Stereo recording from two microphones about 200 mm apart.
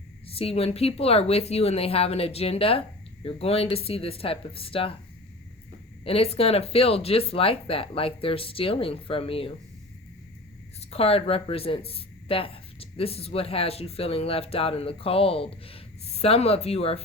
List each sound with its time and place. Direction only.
0.3 s speech: 30° left (ahead or behind)
6.1 s speech: 30° left (ahead or behind)
10.8 s speech: 30° left (ahead or behind)